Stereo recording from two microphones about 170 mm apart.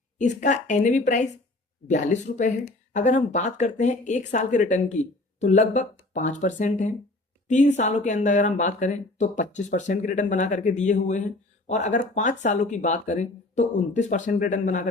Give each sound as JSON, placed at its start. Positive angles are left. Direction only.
{"t": 0.2, "sound": "speech", "side_deg": 45}